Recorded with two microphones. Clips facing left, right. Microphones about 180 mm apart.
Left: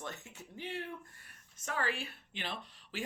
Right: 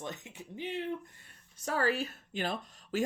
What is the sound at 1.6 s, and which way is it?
A woman's voice, 40° right (ahead or behind).